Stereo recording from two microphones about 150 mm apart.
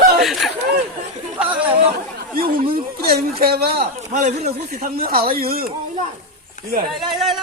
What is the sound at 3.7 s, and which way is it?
Speech, 45° right (ahead or behind).